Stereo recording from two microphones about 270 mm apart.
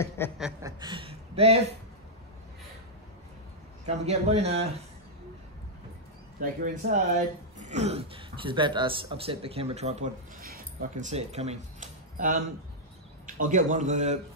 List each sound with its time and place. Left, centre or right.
0.4 s a man's voice: centre
3.8 s a man's voice: right
6.4 s a man's voice: right